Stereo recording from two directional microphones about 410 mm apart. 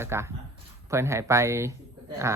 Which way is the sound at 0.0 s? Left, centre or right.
Centre.